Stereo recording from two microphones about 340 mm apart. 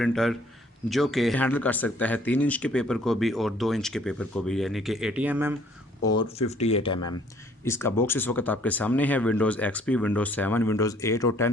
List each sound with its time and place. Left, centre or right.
0.0 s speech: centre
6.6 s speech: centre